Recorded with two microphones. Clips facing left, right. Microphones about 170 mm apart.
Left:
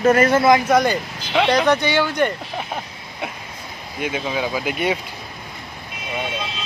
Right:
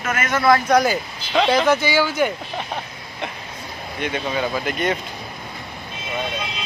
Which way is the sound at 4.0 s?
5° left (ahead or behind).